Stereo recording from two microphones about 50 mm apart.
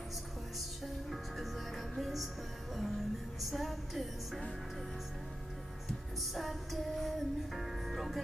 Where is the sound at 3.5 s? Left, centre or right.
Centre.